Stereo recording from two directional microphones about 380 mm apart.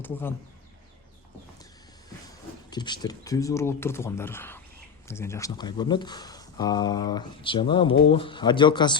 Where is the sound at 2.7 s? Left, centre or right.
Centre.